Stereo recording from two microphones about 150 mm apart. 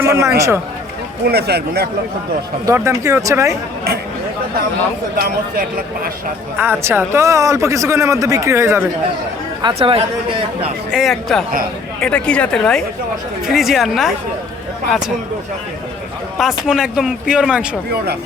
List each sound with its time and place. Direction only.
0.0 s speech: 20° right (ahead or behind)
1.2 s speech: 90° right
2.6 s speech: 20° right (ahead or behind)
5.1 s speech: 75° right (ahead or behind)
6.6 s speech: 15° right (ahead or behind)
9.7 s speech: 35° right (ahead or behind)
10.9 s a woman's voice: centre (ahead or behind)
16.4 s speech: 5° right (ahead or behind)